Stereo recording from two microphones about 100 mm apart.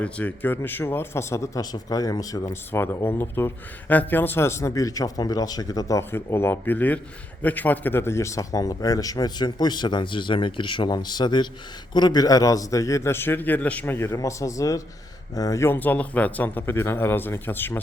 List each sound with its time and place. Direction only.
0.0 s speech: 15° left (ahead or behind); by 6.0 s 40° left (ahead or behind)
6.0 s a man's voice: 25° left (ahead or behind)